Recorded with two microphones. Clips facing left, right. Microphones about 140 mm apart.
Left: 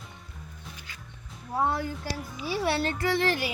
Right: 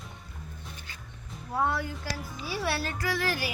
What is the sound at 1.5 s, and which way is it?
Speech, 20° left (ahead or behind).